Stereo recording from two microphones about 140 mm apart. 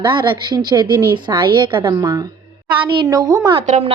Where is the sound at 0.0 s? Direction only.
35° right (ahead or behind).